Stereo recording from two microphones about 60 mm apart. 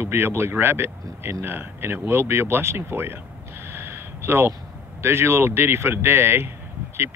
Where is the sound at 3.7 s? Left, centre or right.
Right.